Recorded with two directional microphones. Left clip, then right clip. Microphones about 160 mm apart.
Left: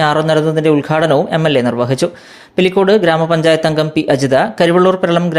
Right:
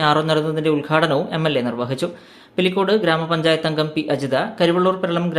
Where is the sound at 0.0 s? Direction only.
35° left (ahead or behind).